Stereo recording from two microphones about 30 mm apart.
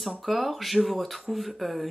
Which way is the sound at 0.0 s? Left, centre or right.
Centre.